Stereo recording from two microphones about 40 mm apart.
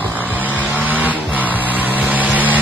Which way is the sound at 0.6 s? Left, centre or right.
Right.